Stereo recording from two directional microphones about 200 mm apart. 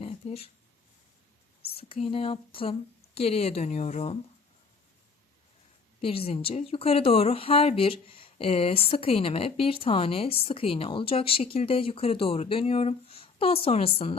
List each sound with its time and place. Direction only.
0.0 s a sound: 30° left (ahead or behind)
1.7 s a woman's voice: 30° left (ahead or behind)
6.0 s speech: 30° left (ahead or behind)